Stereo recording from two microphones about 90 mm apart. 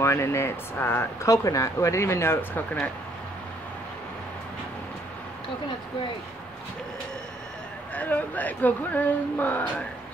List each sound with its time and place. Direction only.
0.0 s speech: 30° left (ahead or behind)
1.3 s speech: 35° left (ahead or behind); by 2.9 s 20° left (ahead or behind)
7.9 s speech: 15° left (ahead or behind)